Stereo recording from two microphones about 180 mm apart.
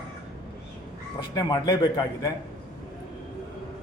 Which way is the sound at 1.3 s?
20° left (ahead or behind).